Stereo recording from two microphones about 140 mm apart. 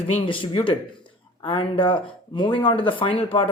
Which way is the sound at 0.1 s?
40° left (ahead or behind).